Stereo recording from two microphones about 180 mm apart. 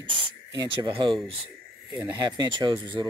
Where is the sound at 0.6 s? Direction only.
25° right (ahead or behind).